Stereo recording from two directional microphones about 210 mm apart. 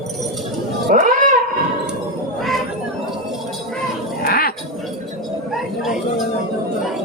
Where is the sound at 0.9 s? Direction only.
40° right (ahead or behind).